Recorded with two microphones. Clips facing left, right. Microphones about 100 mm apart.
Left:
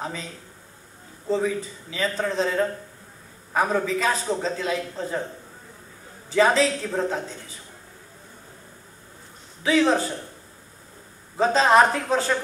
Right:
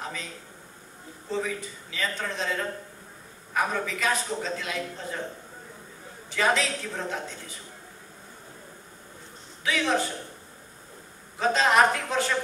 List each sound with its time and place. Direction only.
0.0 s a man's voice: 30° left (ahead or behind)
1.3 s a man's voice: 35° left (ahead or behind)
6.3 s a man's voice: 30° left (ahead or behind)
9.6 s a man's voice: 30° left (ahead or behind)
11.3 s a man's voice: 30° left (ahead or behind)